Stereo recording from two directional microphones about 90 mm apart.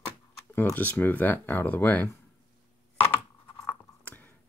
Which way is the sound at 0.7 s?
20° left (ahead or behind).